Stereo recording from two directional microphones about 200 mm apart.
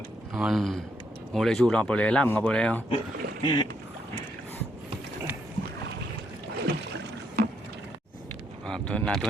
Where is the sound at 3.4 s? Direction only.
25° left (ahead or behind).